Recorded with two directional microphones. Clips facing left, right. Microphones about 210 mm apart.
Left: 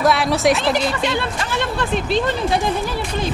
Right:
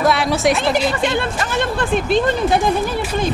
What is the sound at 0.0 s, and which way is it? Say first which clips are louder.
Speech: even; centre (ahead or behind).